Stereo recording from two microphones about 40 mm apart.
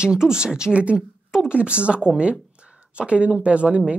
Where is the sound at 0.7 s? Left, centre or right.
Right.